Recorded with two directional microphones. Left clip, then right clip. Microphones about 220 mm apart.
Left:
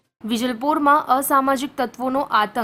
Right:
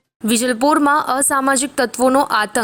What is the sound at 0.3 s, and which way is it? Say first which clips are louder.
Speech: right 6 dB; 25° right (ahead or behind).